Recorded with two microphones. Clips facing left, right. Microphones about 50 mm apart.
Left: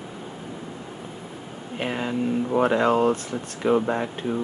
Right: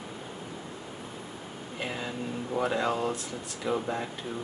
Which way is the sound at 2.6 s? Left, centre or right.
Left.